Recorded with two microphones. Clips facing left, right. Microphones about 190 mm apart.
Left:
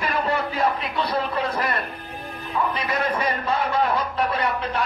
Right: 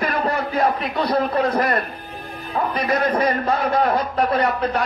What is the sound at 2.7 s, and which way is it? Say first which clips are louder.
A man's voice: right 5 dB; 45° right (ahead or behind).